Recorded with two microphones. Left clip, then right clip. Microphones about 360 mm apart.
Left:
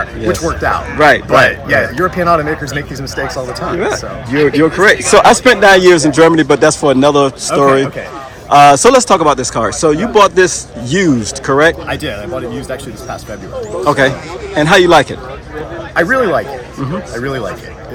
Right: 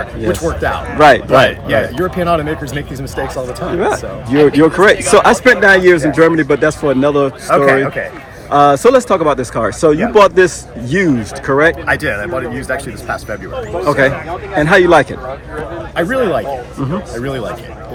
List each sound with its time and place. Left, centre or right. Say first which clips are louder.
0.3 s speech: left 2 dB; centre
3.2 s speech: left 1 dB; centre
13.8 s speech: left 1 dB; centre